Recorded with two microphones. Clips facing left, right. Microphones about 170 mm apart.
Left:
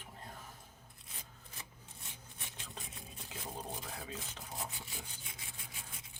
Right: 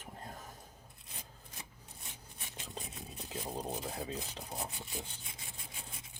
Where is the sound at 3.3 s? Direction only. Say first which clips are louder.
Right 5 dB; 35° right (ahead or behind).